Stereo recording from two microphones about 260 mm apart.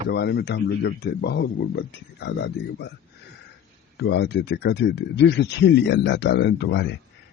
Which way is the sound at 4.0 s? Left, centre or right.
Left.